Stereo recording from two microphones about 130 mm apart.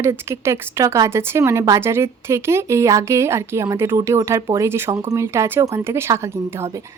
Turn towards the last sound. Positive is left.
turn(degrees=-20)  # may be behind; listen again after turning